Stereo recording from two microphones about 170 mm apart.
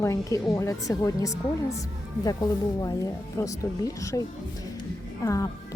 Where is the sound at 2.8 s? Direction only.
20° left (ahead or behind).